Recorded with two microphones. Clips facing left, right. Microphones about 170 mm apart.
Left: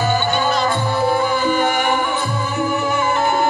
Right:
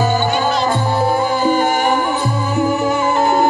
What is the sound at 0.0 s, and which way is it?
Music, 40° right (ahead or behind).